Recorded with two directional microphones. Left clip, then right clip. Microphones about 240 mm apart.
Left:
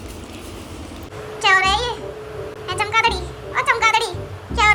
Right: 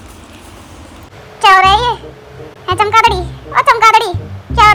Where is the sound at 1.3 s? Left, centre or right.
Centre.